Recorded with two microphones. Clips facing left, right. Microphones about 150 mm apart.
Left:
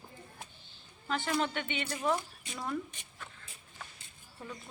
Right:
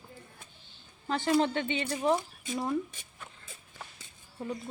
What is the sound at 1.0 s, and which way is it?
Speech, 30° right (ahead or behind).